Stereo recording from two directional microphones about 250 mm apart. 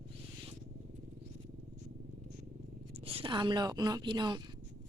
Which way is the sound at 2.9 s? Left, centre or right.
Right.